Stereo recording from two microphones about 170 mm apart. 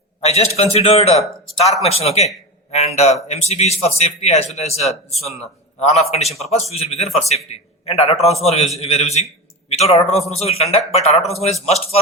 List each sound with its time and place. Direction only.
0.2 s speech: 40° left (ahead or behind)